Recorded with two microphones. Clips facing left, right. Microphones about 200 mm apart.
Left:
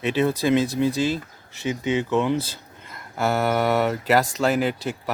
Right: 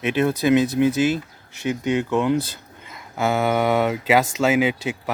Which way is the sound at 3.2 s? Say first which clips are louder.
Right 1 dB; centre (ahead or behind).